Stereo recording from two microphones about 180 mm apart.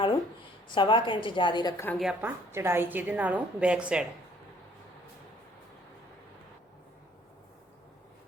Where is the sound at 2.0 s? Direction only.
10° right (ahead or behind).